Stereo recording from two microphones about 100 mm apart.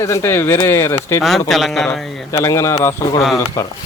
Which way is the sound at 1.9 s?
30° left (ahead or behind).